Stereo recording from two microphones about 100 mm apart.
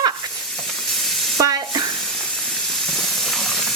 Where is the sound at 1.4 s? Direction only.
40° right (ahead or behind).